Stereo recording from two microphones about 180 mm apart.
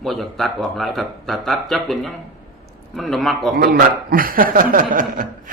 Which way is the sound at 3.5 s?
60° right (ahead or behind).